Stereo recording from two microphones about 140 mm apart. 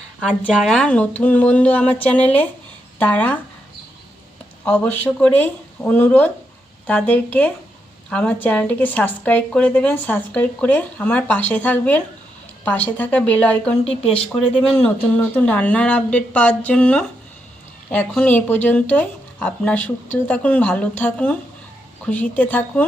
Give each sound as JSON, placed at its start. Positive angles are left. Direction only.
{"t": 0.3, "sound": "a woman's voice", "side_deg": 5}
{"t": 4.6, "sound": "a woman's voice", "side_deg": 10}
{"t": 13.8, "sound": "speech", "side_deg": 45}
{"t": 14.3, "sound": "a woman's voice", "side_deg": 5}